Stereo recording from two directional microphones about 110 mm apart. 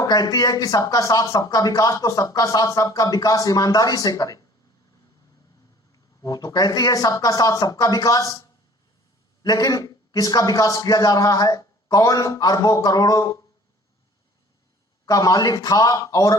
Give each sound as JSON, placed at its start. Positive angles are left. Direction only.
{"t": 0.0, "sound": "speech", "side_deg": 35}
{"t": 6.2, "sound": "speech", "side_deg": 35}
{"t": 15.0, "sound": "speech", "side_deg": 35}